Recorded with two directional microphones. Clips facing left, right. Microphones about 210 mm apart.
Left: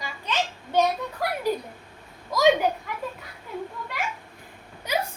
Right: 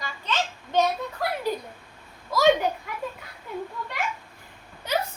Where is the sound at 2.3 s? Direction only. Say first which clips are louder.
Even; 15° left (ahead or behind).